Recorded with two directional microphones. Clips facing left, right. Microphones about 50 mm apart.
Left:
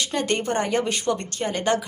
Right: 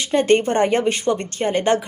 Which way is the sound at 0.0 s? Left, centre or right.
Right.